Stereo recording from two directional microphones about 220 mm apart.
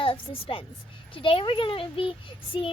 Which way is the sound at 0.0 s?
25° left (ahead or behind).